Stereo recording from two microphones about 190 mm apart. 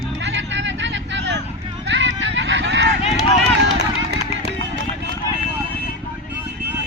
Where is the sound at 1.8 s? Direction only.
70° right (ahead or behind).